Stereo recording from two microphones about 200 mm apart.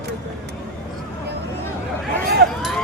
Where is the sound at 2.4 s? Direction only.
55° right (ahead or behind).